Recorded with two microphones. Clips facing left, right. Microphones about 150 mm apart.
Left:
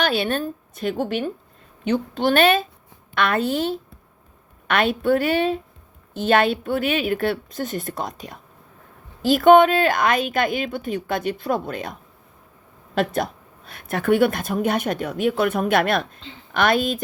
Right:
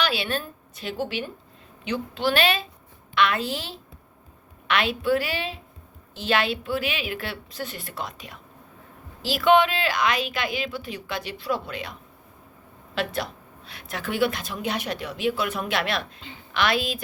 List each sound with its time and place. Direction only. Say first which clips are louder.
0.0 s a woman's voice: left 5 dB; 50° left (ahead or behind)
13.7 s a woman's voice: left 12 dB; 50° left (ahead or behind)